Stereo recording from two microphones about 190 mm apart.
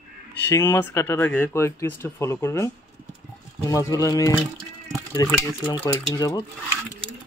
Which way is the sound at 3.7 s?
15° left (ahead or behind).